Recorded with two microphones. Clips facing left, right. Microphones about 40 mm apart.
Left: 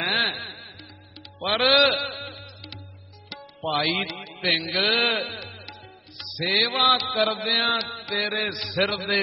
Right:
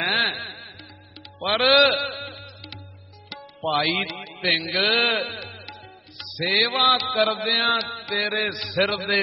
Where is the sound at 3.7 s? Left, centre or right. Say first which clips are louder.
Right 1 dB; centre.